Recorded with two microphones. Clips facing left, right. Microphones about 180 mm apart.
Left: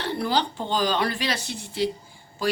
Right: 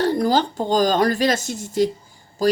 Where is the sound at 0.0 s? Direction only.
40° right (ahead or behind).